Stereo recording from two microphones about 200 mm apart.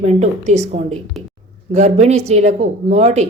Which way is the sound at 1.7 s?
35° right (ahead or behind).